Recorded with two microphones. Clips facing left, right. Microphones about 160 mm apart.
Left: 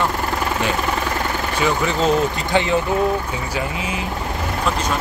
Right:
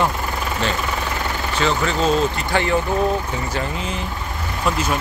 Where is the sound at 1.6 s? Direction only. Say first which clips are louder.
Even; 15° left (ahead or behind).